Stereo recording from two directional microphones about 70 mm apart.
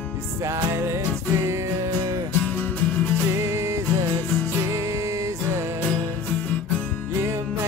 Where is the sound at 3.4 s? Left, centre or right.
Right.